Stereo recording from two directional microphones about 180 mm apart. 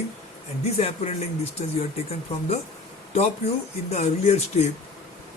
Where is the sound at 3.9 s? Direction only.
35° left (ahead or behind).